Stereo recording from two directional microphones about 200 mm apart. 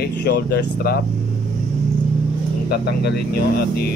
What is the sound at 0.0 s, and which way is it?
Speech, 55° left (ahead or behind).